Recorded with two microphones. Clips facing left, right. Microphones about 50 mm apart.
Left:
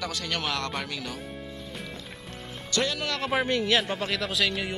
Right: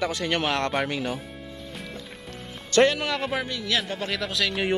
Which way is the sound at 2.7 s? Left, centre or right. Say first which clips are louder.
Right 9 dB; right.